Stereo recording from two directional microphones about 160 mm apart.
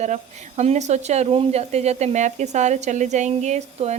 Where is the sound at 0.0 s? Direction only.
45° right (ahead or behind).